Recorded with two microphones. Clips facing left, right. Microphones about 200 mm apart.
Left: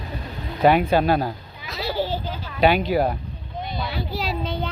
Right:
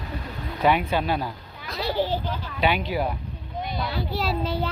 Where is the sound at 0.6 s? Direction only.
40° left (ahead or behind).